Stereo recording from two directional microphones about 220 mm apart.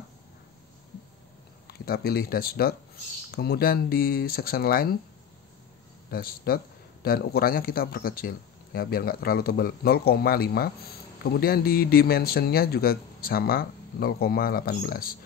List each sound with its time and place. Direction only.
1.7 s a man's voice: 45° left (ahead or behind)
6.0 s a man's voice: 45° left (ahead or behind)